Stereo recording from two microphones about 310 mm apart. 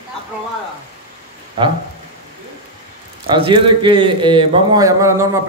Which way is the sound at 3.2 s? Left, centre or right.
Centre.